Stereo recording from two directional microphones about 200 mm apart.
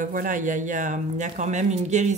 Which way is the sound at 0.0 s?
40° right (ahead or behind).